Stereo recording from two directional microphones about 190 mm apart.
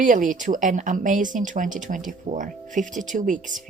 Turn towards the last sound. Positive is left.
turn(degrees=-45)  # may be behind; listen again after turning